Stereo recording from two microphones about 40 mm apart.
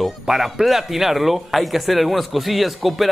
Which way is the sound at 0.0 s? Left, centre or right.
Centre.